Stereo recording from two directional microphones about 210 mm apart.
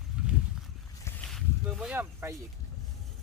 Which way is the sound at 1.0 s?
5° left (ahead or behind).